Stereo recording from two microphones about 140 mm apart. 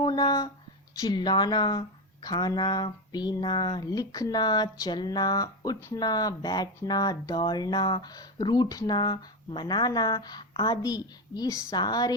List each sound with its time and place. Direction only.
0.0 s speech: 30° left (ahead or behind)